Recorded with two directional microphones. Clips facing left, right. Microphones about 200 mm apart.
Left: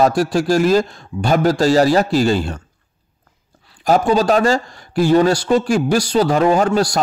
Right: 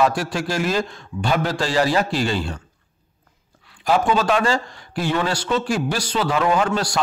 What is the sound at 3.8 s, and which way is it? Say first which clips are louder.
A man's voice: left 4 dB; 40° left (ahead or behind).